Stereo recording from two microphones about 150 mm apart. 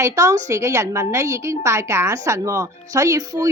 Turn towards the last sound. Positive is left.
turn(degrees=-25)  # may be behind; listen again after turning